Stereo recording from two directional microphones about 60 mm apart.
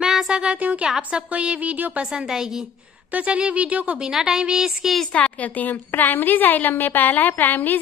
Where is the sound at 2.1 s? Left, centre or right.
Centre.